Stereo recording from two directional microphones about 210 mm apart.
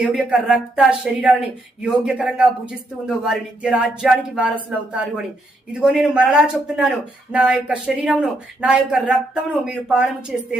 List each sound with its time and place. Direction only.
0.0 s speech: 5° right (ahead or behind)